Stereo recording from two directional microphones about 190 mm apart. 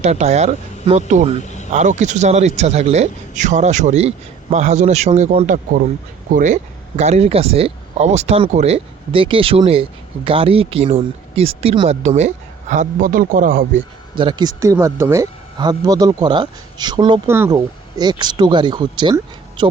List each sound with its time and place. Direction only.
0.0 s a man's voice: 35° right (ahead or behind)
1.4 s a sound: 40° left (ahead or behind)
1.7 s a man's voice: 40° right (ahead or behind)
14.2 s speech: 25° right (ahead or behind)